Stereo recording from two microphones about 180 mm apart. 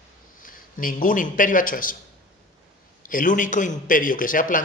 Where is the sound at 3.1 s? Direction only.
45° left (ahead or behind).